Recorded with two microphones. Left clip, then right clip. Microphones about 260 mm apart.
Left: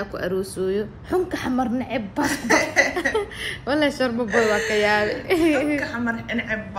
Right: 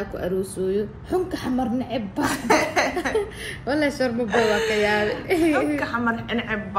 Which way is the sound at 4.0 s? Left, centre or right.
Left.